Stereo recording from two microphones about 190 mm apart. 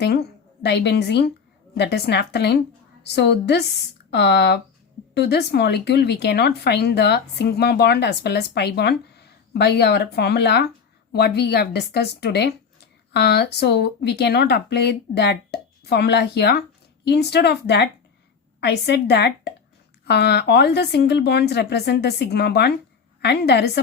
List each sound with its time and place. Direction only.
0.0 s speech: 60° left (ahead or behind)